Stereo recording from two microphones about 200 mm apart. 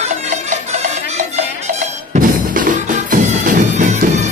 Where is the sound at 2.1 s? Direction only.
40° right (ahead or behind).